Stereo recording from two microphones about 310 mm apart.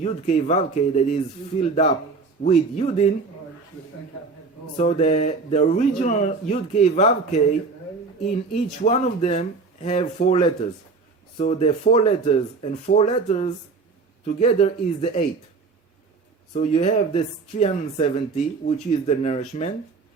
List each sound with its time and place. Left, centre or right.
0.0 s speech: left
4.8 s speech: left
8.8 s speech: left
16.5 s speech: left